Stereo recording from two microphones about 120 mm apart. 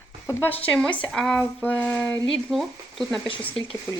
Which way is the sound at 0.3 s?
20° left (ahead or behind).